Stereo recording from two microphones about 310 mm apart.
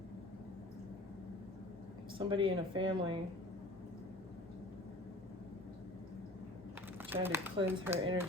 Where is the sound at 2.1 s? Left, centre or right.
Centre.